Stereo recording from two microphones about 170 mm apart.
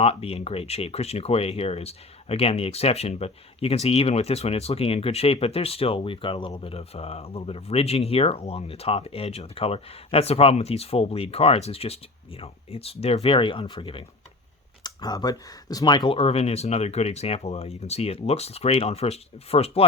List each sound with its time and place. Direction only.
0.0 s speech: 35° left (ahead or behind)